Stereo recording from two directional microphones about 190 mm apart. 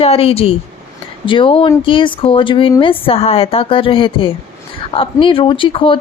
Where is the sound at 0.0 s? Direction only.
30° left (ahead or behind).